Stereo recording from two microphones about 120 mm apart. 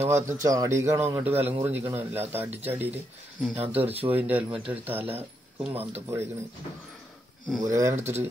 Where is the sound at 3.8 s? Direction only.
55° right (ahead or behind).